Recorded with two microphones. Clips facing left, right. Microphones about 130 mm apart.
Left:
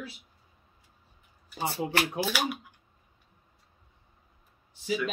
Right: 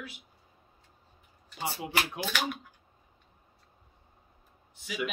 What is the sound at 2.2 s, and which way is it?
Speech, 5° left (ahead or behind).